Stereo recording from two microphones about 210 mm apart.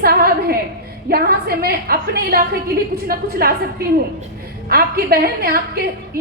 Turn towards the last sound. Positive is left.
turn(degrees=-45)  # may be behind; listen again after turning